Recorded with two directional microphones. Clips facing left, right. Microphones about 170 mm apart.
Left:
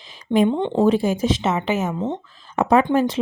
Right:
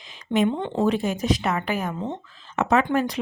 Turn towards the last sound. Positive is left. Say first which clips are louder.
# left 4 dB
turn(degrees=25)  # may be behind; listen again after turning